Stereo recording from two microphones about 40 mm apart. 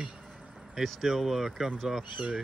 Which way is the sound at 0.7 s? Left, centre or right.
Centre.